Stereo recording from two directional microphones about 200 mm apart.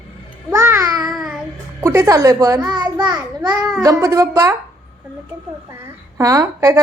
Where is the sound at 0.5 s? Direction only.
15° right (ahead or behind).